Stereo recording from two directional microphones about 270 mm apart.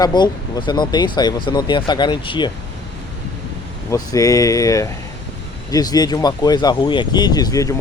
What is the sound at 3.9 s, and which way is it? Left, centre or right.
Speech, centre.